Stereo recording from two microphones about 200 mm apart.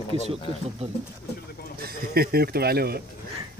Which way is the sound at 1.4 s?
50° left (ahead or behind).